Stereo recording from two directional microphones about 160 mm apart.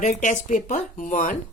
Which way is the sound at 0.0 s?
50° left (ahead or behind).